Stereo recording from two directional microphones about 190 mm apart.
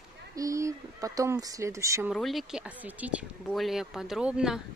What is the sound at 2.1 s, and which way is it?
Speech, centre (ahead or behind).